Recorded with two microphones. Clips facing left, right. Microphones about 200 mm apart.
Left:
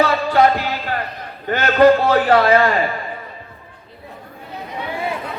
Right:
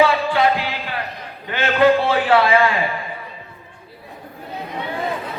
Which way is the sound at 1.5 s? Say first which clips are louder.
Left 3 dB; 40° left (ahead or behind).